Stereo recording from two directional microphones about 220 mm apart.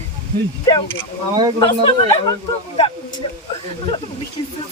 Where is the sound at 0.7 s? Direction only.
15° left (ahead or behind).